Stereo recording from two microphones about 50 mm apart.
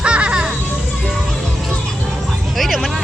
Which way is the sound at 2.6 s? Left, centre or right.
Centre.